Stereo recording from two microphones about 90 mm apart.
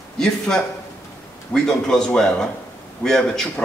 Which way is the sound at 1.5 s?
5° left (ahead or behind).